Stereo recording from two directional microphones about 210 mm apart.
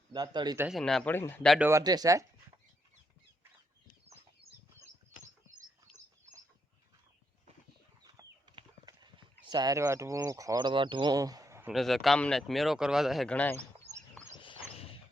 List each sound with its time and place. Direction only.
0.1 s a man's voice: 20° right (ahead or behind)
0.8 s speech: centre (ahead or behind)
1.5 s speech: 10° right (ahead or behind)
8.0 s clip-clop: 20° right (ahead or behind)
9.3 s speech: 20° right (ahead or behind)
11.7 s speech: centre (ahead or behind)
14.3 s dog: 25° left (ahead or behind)